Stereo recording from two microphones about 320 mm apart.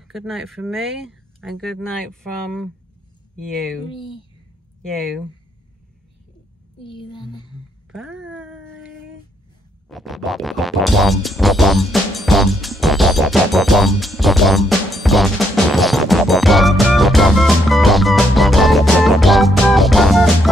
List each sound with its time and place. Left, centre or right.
0.1 s speech: centre
4.8 s speech: centre
6.8 s a child's voice: centre
7.9 s a sound: centre
9.8 s music: centre